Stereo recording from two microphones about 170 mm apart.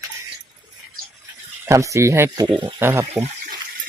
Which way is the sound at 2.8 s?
15° right (ahead or behind).